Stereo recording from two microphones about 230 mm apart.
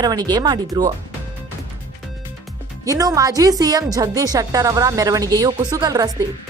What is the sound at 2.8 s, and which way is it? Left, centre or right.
A woman's voice, centre.